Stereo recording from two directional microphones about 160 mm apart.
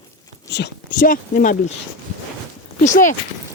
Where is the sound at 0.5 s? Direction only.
75° left (ahead or behind); by 1.7 s 55° left (ahead or behind).